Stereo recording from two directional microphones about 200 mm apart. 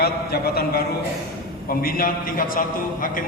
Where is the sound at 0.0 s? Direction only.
50° left (ahead or behind).